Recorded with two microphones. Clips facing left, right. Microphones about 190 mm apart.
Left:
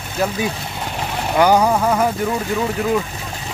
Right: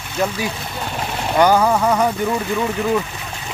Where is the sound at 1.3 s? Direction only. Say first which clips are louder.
Even; 10° left (ahead or behind).